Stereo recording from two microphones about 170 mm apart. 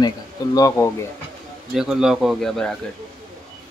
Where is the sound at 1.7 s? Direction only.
5° right (ahead or behind).